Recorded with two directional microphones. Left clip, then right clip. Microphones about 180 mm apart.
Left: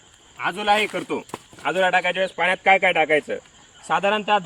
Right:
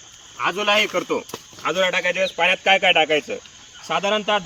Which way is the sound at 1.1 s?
15° left (ahead or behind).